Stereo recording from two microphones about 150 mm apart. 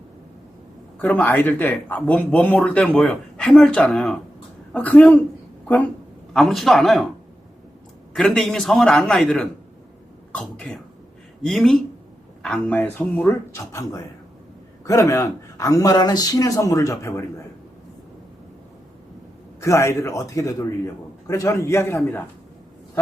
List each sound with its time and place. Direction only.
1.0 s speech: 10° left (ahead or behind)
6.3 s a man's voice: centre (ahead or behind)
8.1 s a man's voice: centre (ahead or behind); by 17.2 s 20° left (ahead or behind)
19.6 s a man's voice: 20° left (ahead or behind)